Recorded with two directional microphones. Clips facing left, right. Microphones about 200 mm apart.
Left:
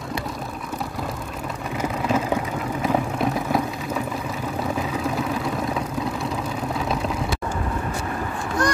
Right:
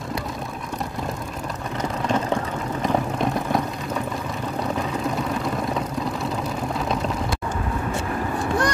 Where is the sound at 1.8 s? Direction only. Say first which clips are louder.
Left 1 dB; 5° left (ahead or behind).